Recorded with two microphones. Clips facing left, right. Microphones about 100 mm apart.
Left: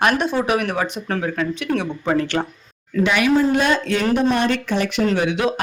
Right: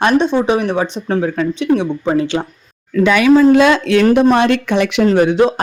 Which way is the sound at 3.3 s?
90° right.